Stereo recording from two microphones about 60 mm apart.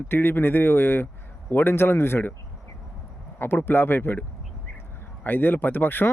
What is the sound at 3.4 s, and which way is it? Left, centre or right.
Speech, left.